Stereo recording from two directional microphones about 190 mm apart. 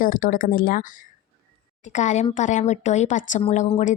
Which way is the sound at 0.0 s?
45° left (ahead or behind).